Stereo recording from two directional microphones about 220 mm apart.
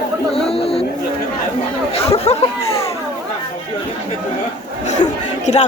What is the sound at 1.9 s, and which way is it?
Chatter, 30° left (ahead or behind).